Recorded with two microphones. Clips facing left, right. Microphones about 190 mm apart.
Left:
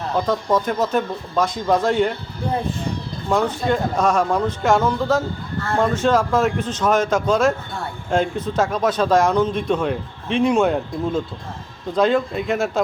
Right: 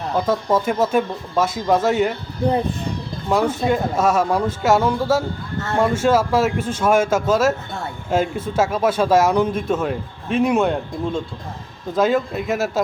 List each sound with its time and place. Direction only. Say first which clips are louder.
0.2 s speech: right 1 dB; 5° right (ahead or behind)
3.2 s speech: right 1 dB; 5° right (ahead or behind)